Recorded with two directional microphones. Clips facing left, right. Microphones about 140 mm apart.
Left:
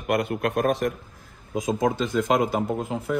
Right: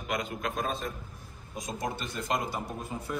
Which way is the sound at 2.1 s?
90° left.